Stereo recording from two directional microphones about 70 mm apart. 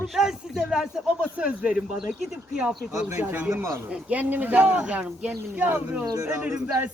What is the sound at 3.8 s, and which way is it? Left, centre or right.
A man's voice, right.